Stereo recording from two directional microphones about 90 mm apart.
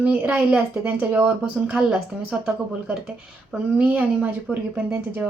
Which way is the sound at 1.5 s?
10° right (ahead or behind).